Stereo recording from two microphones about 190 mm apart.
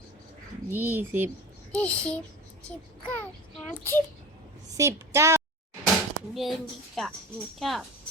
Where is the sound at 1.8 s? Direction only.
5° left (ahead or behind).